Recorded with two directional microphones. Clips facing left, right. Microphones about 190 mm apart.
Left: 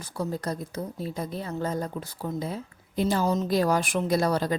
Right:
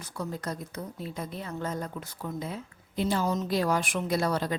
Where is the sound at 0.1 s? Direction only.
30° left (ahead or behind).